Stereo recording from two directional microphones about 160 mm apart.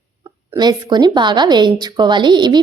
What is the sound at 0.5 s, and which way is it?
A woman's voice, 25° right (ahead or behind).